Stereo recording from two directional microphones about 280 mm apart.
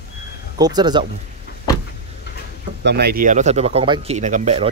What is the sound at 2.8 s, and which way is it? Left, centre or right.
Speech, right.